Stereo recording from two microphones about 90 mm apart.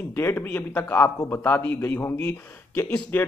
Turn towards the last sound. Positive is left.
turn(degrees=25)  # may be behind; listen again after turning